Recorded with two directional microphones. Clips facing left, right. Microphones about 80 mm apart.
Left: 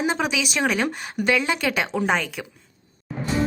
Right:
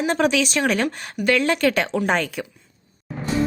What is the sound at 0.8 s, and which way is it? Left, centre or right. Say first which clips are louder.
A woman's voice: right 1 dB; centre.